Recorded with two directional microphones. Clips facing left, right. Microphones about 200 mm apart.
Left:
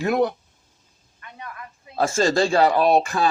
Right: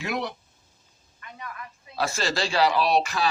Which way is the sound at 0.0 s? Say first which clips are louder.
Left 9 dB; 50° left (ahead or behind).